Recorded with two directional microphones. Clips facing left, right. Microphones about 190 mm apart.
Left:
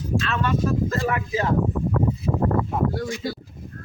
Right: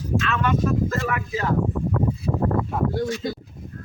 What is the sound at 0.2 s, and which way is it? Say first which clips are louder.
Speech: right 1 dB; 35° left (ahead or behind).